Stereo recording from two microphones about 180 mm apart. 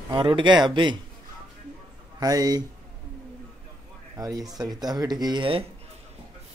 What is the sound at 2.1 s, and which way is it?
Speech, 20° right (ahead or behind).